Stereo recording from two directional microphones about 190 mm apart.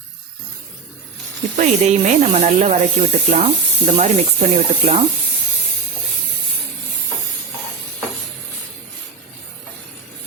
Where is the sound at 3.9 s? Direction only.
35° right (ahead or behind).